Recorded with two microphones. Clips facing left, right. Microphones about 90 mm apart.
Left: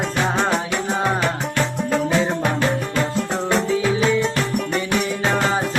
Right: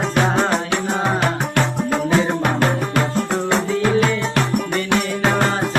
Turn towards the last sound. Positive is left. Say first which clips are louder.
# right 1 dB
turn(degrees=-55)  # may be behind; listen again after turning